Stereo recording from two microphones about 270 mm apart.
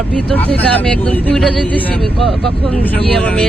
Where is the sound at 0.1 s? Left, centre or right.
Centre.